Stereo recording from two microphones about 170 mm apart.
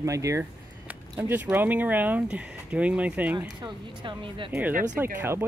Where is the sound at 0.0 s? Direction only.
20° right (ahead or behind).